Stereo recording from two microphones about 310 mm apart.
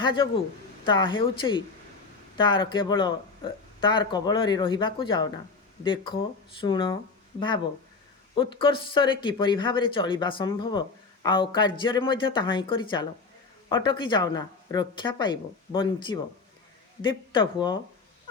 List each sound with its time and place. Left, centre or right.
0.0 s speech: centre